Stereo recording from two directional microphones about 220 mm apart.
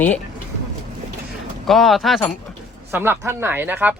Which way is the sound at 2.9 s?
10° right (ahead or behind).